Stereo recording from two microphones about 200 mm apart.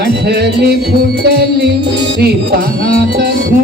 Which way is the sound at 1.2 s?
55° right (ahead or behind).